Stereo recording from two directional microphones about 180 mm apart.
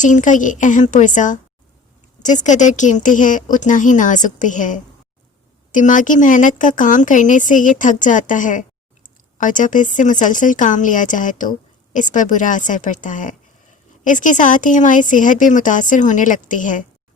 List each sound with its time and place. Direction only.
0.0 s speech: 45° left (ahead or behind)